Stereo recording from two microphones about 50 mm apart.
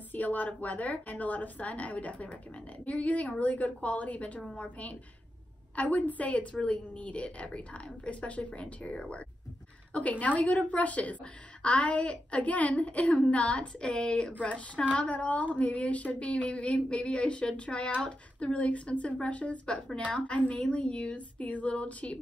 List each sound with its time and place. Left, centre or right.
0.1 s a woman's voice: left